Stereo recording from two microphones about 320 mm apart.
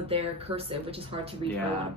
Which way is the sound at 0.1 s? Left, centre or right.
Centre.